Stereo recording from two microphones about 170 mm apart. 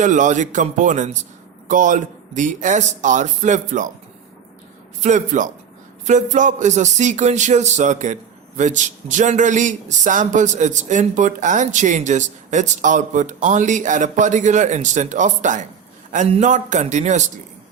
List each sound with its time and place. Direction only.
0.0 s speech: 45° right (ahead or behind)
4.9 s speech: 45° right (ahead or behind)